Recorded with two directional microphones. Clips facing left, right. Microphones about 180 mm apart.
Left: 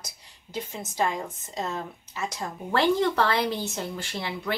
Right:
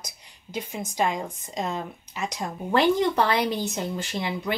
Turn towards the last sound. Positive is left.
turn(degrees=-20)  # may be behind; listen again after turning